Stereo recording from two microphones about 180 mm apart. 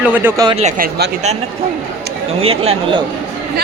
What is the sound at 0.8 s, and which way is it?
Speech, 60° right (ahead or behind).